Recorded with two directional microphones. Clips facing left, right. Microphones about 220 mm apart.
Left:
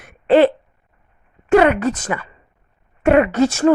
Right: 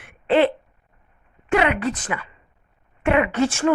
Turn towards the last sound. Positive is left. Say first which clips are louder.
# left 5 dB
turn(degrees=40)  # may be behind; listen again after turning